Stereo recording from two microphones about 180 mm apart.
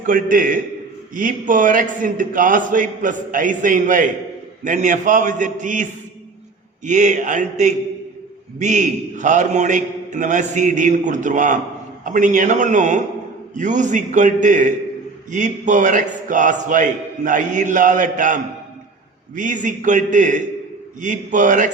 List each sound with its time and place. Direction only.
0.0 s a man's voice: 50° right (ahead or behind)
19.4 s a man's voice: 45° right (ahead or behind)